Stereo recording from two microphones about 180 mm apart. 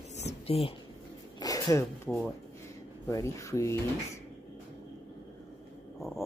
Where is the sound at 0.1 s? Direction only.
35° left (ahead or behind).